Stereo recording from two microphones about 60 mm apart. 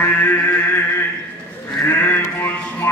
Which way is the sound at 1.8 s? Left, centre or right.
Left.